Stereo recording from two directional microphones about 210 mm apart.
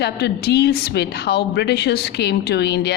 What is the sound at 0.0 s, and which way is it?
Speech, 50° left (ahead or behind).